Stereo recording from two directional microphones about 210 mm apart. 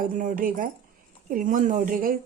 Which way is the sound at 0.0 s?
40° right (ahead or behind).